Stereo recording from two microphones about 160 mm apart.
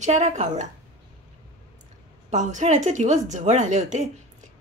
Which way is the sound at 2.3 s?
45° right (ahead or behind).